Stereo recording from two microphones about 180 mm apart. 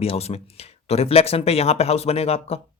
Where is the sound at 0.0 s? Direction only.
35° left (ahead or behind).